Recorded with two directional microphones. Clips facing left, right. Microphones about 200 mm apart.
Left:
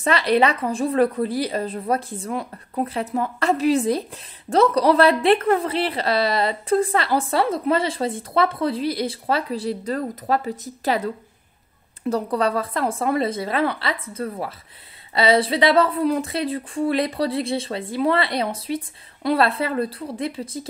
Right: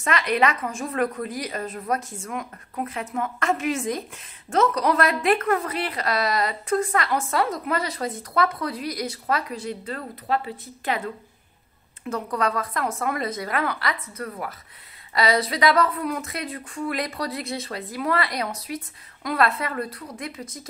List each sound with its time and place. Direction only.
0.0 s speech: 35° left (ahead or behind)
12.1 s speech: 35° left (ahead or behind)